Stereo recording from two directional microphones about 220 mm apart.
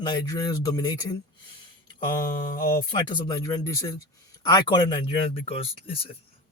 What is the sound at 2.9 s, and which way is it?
Speech, 20° left (ahead or behind).